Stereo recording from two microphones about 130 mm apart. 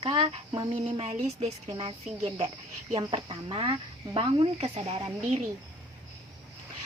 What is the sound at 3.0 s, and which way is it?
Speech, 40° right (ahead or behind).